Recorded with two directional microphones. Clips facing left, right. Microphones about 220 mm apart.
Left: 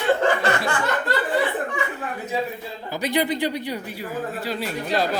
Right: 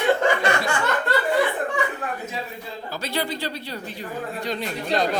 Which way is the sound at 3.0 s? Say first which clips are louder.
Left 6 dB; 15° left (ahead or behind).